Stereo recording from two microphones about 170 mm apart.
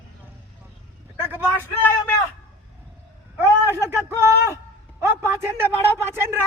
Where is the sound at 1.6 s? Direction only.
10° left (ahead or behind).